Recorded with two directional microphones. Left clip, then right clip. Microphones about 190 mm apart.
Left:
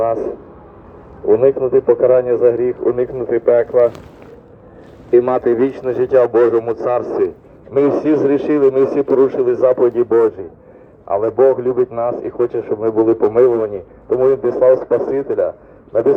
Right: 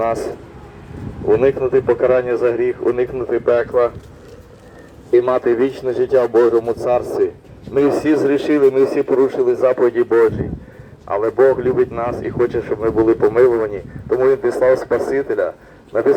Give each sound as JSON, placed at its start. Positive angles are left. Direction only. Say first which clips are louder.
{"t": 0.0, "sound": "speech", "louder": "left 2 dB", "side_deg": 45}
{"t": 5.1, "sound": "speech", "louder": "left 1 dB", "side_deg": 45}